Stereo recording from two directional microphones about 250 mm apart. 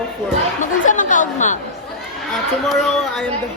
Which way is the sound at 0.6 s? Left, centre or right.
Left.